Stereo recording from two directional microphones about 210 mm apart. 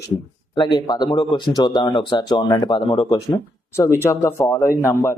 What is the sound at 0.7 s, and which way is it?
Speech, 20° left (ahead or behind).